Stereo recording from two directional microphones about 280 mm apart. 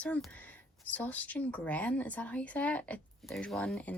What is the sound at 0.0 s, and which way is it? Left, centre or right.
Speech, centre.